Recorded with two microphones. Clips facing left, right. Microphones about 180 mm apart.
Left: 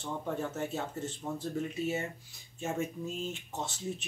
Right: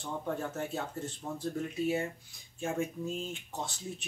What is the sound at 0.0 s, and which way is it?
Speech, centre (ahead or behind).